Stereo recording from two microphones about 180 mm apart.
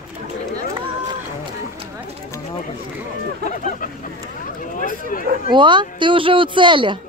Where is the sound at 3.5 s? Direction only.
45° left (ahead or behind).